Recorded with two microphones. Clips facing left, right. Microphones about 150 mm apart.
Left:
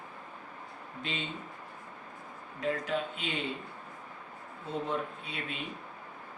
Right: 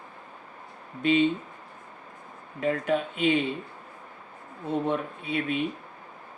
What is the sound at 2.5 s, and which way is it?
Speech, 55° right (ahead or behind).